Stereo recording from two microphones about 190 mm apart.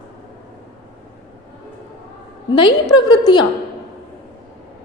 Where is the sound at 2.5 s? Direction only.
25° left (ahead or behind).